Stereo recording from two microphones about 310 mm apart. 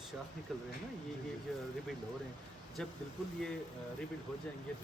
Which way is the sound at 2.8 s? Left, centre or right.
Centre.